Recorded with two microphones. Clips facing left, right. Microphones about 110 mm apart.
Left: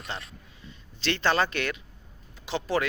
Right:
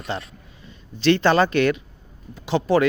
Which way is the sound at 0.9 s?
50° right (ahead or behind).